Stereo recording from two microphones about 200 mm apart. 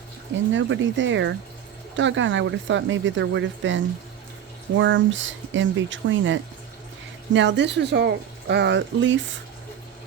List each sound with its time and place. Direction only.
0.5 s speech: 65° right (ahead or behind)
4.8 s a woman's voice: 65° right (ahead or behind)